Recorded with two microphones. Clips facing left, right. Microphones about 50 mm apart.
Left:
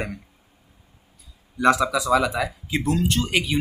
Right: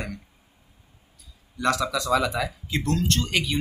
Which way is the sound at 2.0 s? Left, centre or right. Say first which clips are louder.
Left 3 dB; centre.